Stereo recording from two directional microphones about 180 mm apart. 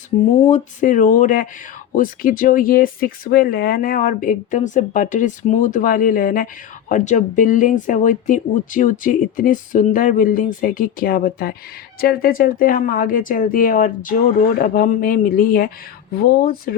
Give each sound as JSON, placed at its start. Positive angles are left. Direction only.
{"t": 0.4, "sound": "speech", "side_deg": 45}